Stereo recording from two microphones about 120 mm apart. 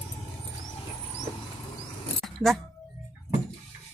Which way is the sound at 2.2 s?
Centre (ahead or behind).